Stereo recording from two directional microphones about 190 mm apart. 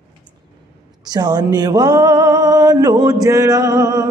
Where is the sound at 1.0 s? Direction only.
20° right (ahead or behind).